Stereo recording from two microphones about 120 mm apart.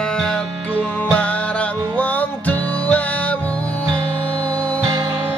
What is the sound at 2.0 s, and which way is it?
Music, 15° left (ahead or behind).